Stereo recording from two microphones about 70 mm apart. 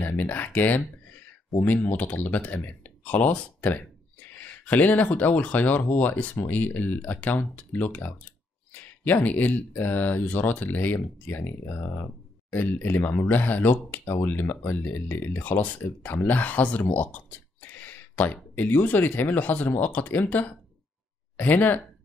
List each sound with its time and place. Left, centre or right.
0.1 s speech: left